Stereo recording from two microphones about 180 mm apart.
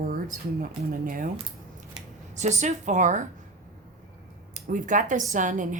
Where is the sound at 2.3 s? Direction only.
40° right (ahead or behind).